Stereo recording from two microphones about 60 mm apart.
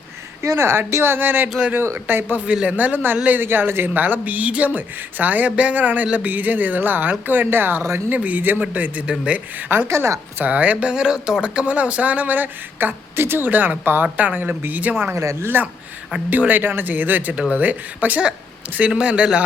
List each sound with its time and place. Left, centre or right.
0.4 s speech: right
2.5 s speech: right
9.6 s speech: right
9.9 s a woman's voice: right
10.4 s speech: right
15.1 s speech: right
15.4 s speech: right